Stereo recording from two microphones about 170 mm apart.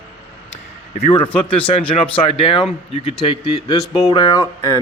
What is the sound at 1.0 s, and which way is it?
Speech, 35° left (ahead or behind).